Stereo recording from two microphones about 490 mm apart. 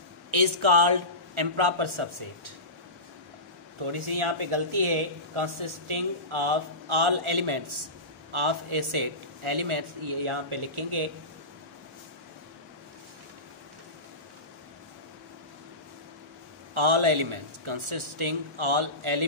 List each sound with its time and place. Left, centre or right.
0.3 s speech: right
3.8 s speech: right
16.7 s speech: right